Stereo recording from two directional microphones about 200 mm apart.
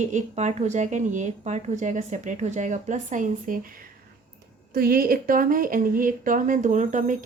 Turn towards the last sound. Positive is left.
turn(degrees=-40)  # may be behind; listen again after turning